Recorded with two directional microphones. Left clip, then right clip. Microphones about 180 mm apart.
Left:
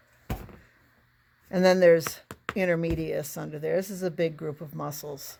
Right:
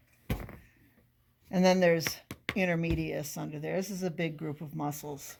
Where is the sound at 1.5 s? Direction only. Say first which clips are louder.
Left 6 dB; 45° left (ahead or behind).